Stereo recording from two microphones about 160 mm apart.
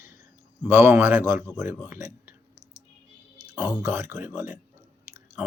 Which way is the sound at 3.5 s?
5° right (ahead or behind).